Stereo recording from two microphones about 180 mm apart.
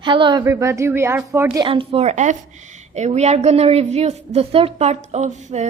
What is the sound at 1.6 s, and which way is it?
A woman's voice, 30° right (ahead or behind).